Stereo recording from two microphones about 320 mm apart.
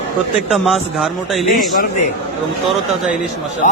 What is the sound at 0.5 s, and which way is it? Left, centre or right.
Speech, centre.